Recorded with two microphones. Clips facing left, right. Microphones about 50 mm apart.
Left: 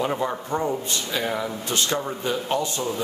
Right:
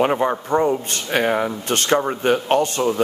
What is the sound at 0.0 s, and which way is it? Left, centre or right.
Speech, right.